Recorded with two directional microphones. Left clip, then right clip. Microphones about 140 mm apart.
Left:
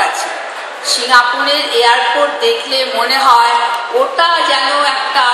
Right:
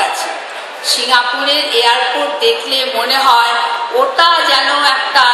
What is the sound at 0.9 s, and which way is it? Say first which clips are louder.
A woman's voice: left 2 dB; 40° right (ahead or behind).